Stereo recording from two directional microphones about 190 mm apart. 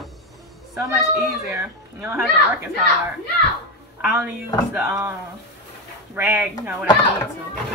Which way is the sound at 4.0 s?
5° right (ahead or behind).